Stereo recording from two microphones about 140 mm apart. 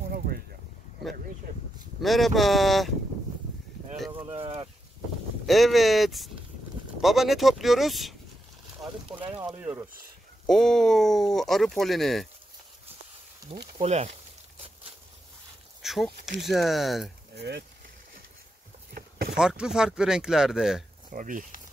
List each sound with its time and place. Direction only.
2.0 s speech: centre (ahead or behind)
4.1 s a sound: 40° right (ahead or behind)
5.5 s speech: centre (ahead or behind)
9.6 s speech: 10° right (ahead or behind)
10.4 s speech: 5° left (ahead or behind)
13.5 s speech: 50° right (ahead or behind)
15.8 s speech: centre (ahead or behind)
18.9 s a sound: 90° right
19.3 s speech: 5° right (ahead or behind)
21.1 s speech: 70° right (ahead or behind)